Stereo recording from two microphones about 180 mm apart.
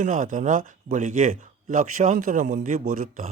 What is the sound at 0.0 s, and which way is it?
Speech, 45° right (ahead or behind).